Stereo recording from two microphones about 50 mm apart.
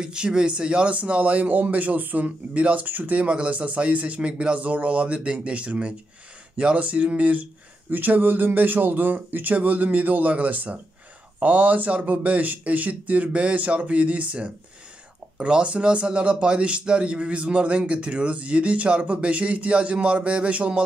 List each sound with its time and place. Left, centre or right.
0.0 s a man's voice: centre
7.9 s a man's voice: right